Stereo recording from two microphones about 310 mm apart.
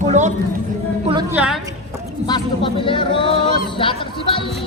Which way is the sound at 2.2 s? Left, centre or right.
Centre.